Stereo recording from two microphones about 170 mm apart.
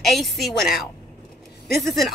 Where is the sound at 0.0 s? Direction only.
Centre (ahead or behind).